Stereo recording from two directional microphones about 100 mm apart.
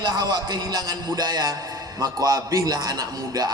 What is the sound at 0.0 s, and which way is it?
A man's voice, 45° right (ahead or behind).